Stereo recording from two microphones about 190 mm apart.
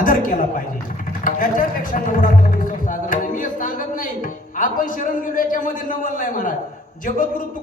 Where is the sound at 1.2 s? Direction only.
45° left (ahead or behind).